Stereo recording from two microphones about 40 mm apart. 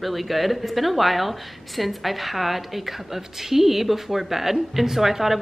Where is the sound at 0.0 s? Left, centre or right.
Centre.